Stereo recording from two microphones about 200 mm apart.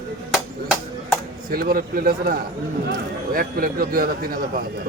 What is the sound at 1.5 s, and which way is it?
Speech, 45° right (ahead or behind).